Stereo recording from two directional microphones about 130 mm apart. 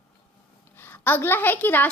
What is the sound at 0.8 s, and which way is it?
A woman's voice, 15° left (ahead or behind).